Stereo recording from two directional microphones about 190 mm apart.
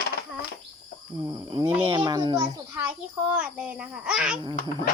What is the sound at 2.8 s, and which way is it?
A child's voice, 10° right (ahead or behind).